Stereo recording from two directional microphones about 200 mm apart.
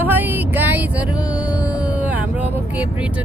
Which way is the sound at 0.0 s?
10° right (ahead or behind).